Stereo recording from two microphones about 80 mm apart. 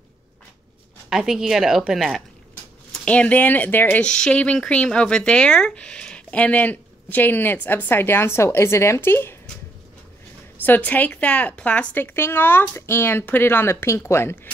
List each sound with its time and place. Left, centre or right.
1.1 s a woman's voice: centre
3.1 s speech: centre
4.0 s speech: centre; by 9.4 s left
10.6 s speech: left
12.0 s speech: left